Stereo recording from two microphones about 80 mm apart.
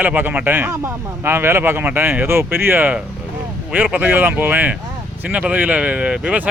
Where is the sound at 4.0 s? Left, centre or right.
Right.